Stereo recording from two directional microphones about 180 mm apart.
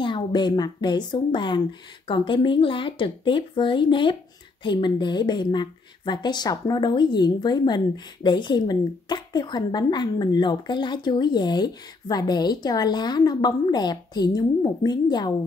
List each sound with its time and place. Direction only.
0.0 s a woman's voice: 25° left (ahead or behind)